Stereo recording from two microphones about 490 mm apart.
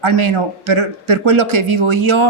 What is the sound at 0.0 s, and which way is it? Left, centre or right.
A man's voice, right.